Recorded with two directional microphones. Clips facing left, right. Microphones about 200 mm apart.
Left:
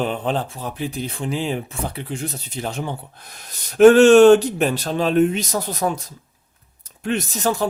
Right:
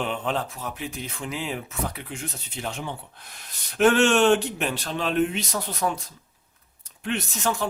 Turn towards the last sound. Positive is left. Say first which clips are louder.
# left 5 dB
turn(degrees=35)  # may be behind; listen again after turning